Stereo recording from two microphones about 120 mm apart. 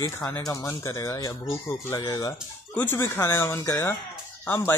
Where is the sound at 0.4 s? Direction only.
25° left (ahead or behind).